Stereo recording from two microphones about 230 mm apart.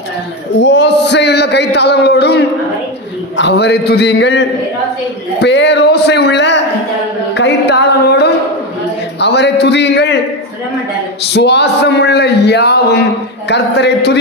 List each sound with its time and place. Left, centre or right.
0.6 s speech: left
11.3 s speech: left